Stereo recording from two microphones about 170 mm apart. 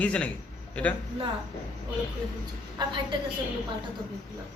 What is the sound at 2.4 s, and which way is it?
Speech, 25° right (ahead or behind).